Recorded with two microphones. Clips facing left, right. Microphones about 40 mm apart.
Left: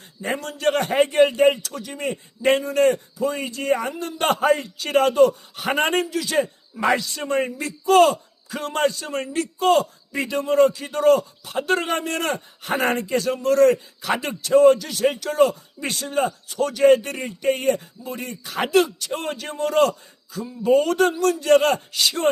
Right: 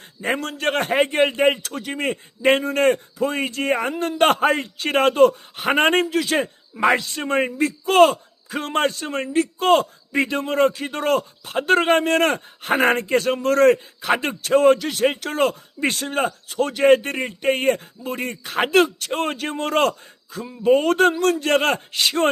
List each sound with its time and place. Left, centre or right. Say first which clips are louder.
0.2 s speech: right 2 dB; right
6.7 s speech: right 2 dB; right